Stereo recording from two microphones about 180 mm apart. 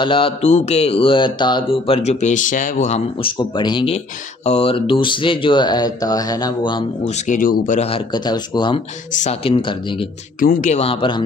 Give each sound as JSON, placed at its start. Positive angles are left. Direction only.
{"t": 0.0, "sound": "speech", "side_deg": 30}
{"t": 7.1, "sound": "speech", "side_deg": 45}
{"t": 9.1, "sound": "speech", "side_deg": 40}
{"t": 10.4, "sound": "speech", "side_deg": 50}